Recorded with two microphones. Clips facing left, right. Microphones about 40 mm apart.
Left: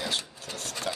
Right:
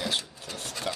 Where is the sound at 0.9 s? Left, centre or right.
Right.